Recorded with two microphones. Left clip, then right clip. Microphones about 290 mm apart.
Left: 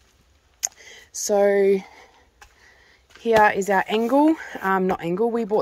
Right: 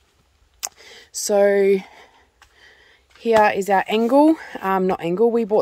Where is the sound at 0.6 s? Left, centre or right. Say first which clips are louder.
Left 2 dB; centre.